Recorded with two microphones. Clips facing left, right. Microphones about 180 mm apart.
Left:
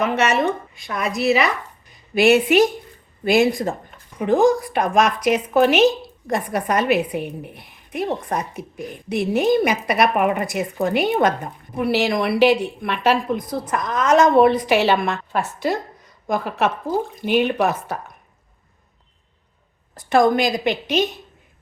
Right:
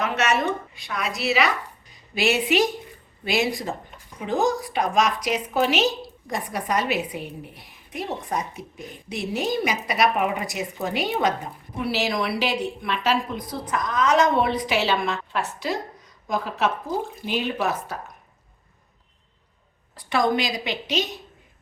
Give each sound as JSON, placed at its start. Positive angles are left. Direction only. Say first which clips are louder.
{"t": 0.0, "sound": "a woman's voice", "louder": "left 4 dB", "side_deg": 55}
{"t": 19.9, "sound": "a woman's voice", "louder": "left 6 dB", "side_deg": 50}